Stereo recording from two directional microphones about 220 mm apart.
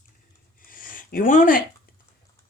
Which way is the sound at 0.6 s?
40° left (ahead or behind).